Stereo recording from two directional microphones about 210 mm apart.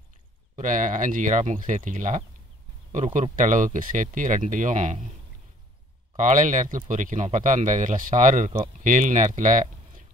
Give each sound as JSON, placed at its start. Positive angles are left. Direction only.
{"t": 0.6, "sound": "speech", "side_deg": -40}
{"t": 6.1, "sound": "speech", "side_deg": -35}